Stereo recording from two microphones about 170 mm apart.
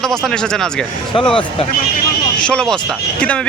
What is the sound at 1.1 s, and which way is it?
Speech, 30° left (ahead or behind).